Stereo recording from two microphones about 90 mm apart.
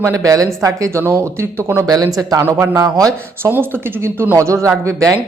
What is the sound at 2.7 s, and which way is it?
Speech, 40° right (ahead or behind).